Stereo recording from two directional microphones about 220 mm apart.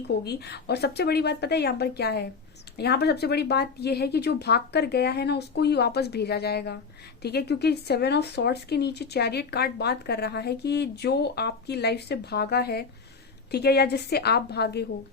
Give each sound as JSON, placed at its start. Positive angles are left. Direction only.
{"t": 0.3, "sound": "speech", "side_deg": 50}